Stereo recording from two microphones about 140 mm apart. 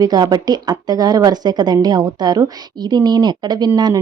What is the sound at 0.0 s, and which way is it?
Speech, 25° right (ahead or behind).